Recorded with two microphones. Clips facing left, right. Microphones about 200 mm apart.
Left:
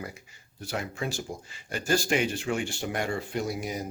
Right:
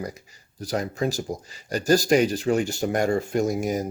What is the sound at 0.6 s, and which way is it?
Speech, 40° right (ahead or behind).